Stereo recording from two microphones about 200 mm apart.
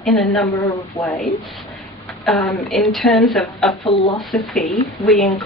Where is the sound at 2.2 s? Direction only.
Centre (ahead or behind).